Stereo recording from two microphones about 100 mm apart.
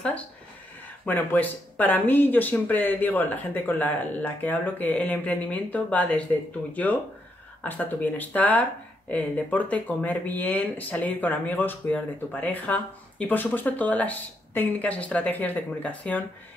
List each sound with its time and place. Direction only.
1.0 s speech: 15° left (ahead or behind)